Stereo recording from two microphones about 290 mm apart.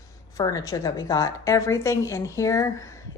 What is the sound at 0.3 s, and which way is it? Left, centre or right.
A woman's voice, centre.